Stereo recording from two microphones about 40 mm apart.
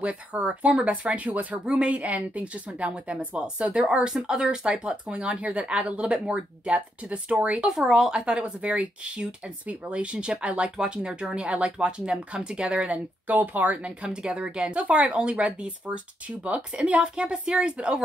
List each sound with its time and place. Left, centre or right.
0.0 s speech: right
4.1 s speech: centre
5.1 s speech: right
7.8 s speech: centre
13.3 s speech: right
13.8 s speech: right